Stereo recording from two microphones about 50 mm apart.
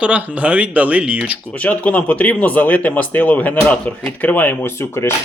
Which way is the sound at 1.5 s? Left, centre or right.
Left.